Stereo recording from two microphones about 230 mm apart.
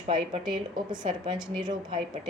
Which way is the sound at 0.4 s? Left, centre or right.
Centre.